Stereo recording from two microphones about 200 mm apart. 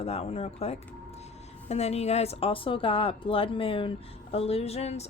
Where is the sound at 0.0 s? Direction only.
30° left (ahead or behind).